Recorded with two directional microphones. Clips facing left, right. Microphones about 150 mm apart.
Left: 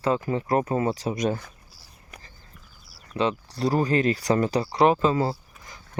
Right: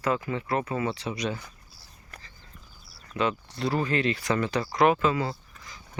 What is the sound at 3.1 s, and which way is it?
Speech, 35° left (ahead or behind).